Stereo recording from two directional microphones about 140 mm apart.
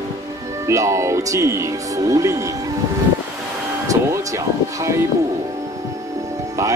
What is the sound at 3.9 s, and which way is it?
Music, 20° right (ahead or behind).